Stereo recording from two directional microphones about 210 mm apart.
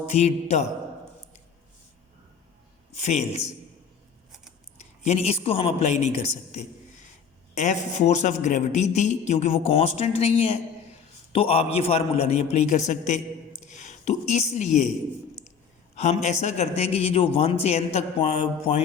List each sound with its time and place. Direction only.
0.1 s a man's voice: 30° left (ahead or behind)
2.9 s a man's voice: 30° left (ahead or behind)
5.0 s a man's voice: 30° left (ahead or behind)
13.7 s a sound: 35° left (ahead or behind)
16.0 s a man's voice: 30° left (ahead or behind)